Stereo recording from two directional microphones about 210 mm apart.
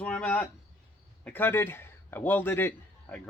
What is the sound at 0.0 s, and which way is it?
Speech, 5° left (ahead or behind).